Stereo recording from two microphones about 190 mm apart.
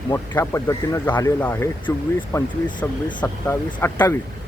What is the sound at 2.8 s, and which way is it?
Speech, 10° left (ahead or behind).